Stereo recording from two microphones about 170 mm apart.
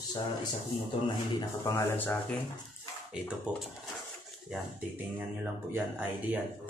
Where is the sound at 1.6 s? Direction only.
15° left (ahead or behind).